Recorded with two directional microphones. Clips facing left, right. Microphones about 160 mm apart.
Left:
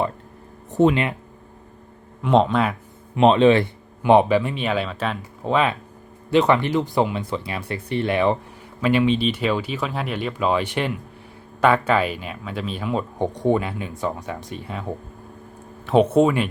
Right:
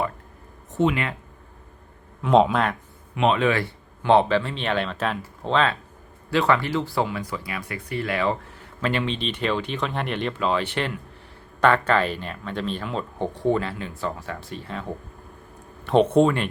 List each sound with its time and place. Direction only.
2.2 s speech: centre (ahead or behind)
3.2 s speech: 30° left (ahead or behind)
4.0 s speech: 15° left (ahead or behind)
8.8 s speech: 10° left (ahead or behind)
15.9 s speech: 5° left (ahead or behind)